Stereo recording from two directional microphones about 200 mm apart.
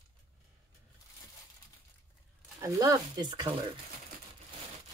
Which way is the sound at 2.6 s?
15° right (ahead or behind).